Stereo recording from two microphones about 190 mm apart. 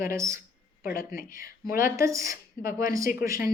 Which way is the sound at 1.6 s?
50° left (ahead or behind).